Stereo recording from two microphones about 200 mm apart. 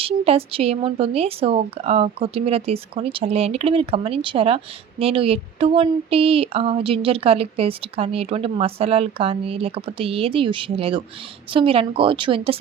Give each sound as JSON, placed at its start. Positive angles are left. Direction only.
{"t": 0.0, "sound": "speech", "side_deg": -30}